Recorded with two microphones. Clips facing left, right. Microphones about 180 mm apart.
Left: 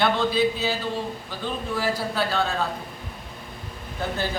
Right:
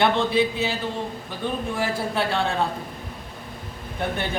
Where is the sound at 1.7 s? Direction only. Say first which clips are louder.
Left 3 dB; 25° right (ahead or behind).